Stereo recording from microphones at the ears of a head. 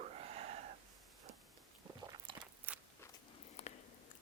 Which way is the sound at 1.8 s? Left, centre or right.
Right.